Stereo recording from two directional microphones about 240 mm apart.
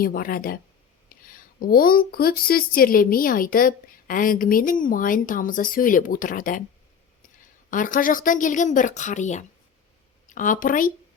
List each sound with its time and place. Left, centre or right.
0.0 s speech: left
1.1 s a sound: left
1.5 s speech: left
7.7 s speech: left